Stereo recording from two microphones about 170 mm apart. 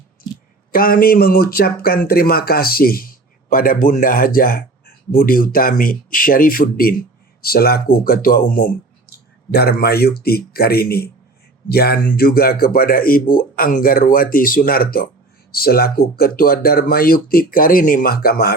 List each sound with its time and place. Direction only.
0.7 s speech: 60° left (ahead or behind)
9.5 s speech: 65° left (ahead or behind)